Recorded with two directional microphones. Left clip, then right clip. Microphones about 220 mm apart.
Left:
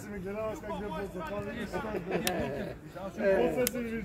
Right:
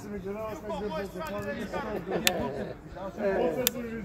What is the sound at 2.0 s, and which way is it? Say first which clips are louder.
Speech: right 6 dB; 45° left (ahead or behind).